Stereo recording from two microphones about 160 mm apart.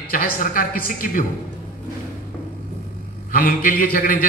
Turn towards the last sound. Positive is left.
turn(degrees=65)  # may be behind; listen again after turning